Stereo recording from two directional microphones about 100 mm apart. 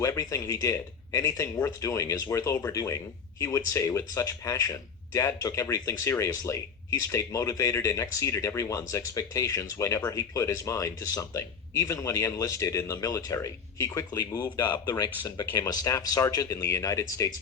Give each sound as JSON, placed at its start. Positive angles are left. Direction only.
{"t": 0.0, "sound": "speech", "side_deg": 35}